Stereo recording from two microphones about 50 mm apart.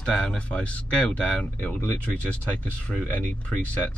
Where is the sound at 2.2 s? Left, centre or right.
Left.